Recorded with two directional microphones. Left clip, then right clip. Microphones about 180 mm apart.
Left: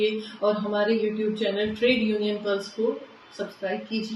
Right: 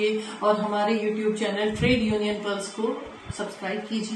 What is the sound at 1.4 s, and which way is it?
Speech, 20° right (ahead or behind).